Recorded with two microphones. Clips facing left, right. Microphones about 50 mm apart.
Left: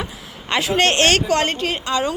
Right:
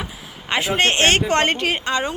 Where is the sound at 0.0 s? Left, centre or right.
Centre.